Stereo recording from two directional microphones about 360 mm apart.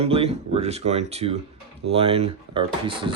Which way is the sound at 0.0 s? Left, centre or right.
Centre.